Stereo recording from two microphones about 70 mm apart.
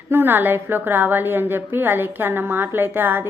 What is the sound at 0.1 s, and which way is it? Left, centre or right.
A woman's voice, right.